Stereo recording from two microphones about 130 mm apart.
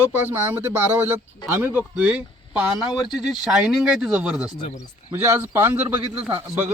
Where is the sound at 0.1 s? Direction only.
15° right (ahead or behind).